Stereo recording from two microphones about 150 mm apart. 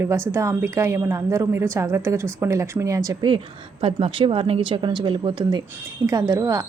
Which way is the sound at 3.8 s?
40° right (ahead or behind).